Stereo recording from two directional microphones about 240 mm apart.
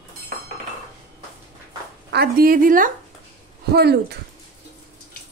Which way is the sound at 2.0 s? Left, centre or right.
Right.